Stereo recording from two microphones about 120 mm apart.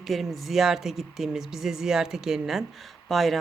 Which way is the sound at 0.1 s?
Centre (ahead or behind).